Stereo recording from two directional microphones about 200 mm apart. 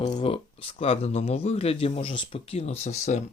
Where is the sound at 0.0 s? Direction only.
30° left (ahead or behind).